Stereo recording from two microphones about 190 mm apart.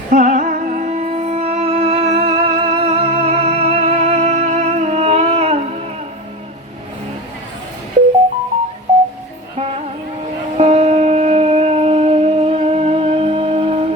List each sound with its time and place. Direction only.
0.1 s music: 40° right (ahead or behind)
9.6 s music: 30° right (ahead or behind)